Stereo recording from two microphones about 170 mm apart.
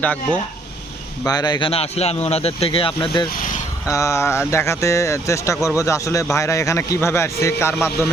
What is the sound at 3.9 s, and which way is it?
Speech, 15° left (ahead or behind).